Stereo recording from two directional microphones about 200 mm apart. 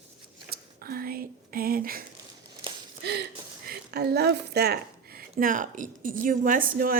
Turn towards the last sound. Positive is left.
turn(degrees=-45)  # may be behind; listen again after turning